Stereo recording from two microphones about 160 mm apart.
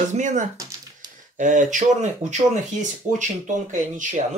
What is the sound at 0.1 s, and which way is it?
Speech, 50° right (ahead or behind).